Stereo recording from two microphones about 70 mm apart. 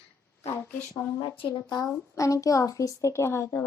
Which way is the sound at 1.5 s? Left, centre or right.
Left.